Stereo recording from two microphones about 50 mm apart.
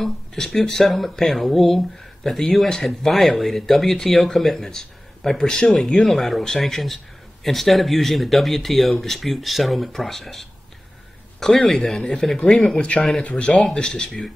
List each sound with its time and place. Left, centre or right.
0.0 s speech: centre
13.7 s speech: centre